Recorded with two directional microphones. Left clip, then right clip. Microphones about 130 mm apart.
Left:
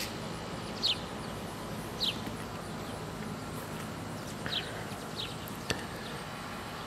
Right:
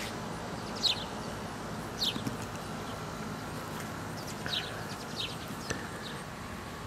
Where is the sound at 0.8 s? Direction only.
20° right (ahead or behind).